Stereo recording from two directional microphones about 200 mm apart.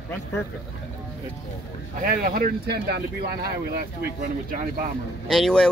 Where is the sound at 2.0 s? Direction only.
45° right (ahead or behind).